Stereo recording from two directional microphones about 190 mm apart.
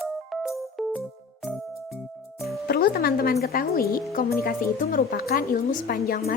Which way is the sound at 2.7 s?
55° left (ahead or behind).